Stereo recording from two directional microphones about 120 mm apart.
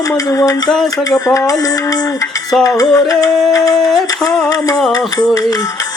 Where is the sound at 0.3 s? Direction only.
30° left (ahead or behind).